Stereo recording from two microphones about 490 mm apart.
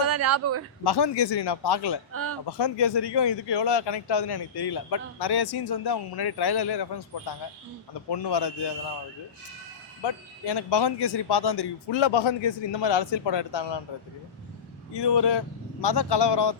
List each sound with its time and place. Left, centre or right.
0.0 s a sound: right
0.9 s a man's voice: left
2.1 s speech: right
2.5 s a man's voice: left
10.0 s speech: left
14.9 s a man's voice: left